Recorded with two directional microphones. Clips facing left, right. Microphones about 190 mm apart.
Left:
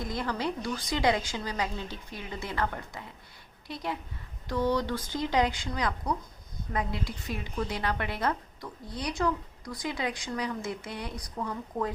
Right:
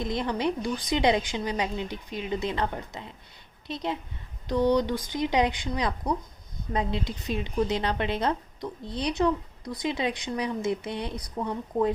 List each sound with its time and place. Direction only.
0.0 s a woman's voice: 20° right (ahead or behind)